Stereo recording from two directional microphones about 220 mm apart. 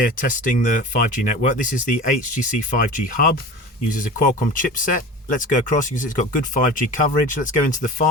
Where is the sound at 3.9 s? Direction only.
40° left (ahead or behind).